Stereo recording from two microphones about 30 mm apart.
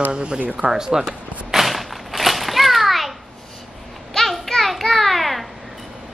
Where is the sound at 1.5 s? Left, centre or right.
Centre.